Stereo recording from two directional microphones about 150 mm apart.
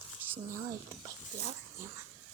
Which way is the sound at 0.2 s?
15° right (ahead or behind).